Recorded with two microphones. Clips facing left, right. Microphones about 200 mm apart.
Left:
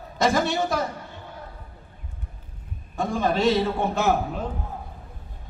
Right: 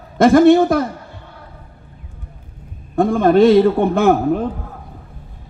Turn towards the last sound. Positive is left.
turn(degrees=-55)  # may be behind; listen again after turning